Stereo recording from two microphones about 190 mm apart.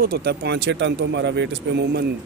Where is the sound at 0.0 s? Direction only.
55° right (ahead or behind).